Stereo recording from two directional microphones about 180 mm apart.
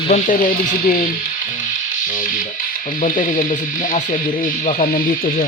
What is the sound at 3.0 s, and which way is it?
Speech, 45° left (ahead or behind).